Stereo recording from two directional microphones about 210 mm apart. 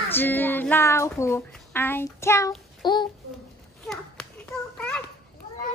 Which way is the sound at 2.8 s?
20° left (ahead or behind).